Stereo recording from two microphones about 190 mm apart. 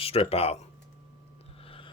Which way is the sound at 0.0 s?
30° left (ahead or behind).